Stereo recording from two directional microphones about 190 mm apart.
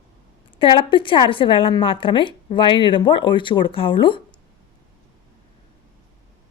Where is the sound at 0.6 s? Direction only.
25° left (ahead or behind).